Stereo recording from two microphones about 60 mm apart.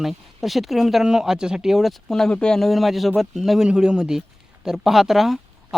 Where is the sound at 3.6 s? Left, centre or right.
Centre.